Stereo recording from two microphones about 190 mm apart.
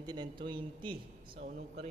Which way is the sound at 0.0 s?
20° right (ahead or behind).